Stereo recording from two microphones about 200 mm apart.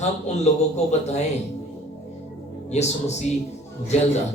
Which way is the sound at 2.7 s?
35° left (ahead or behind).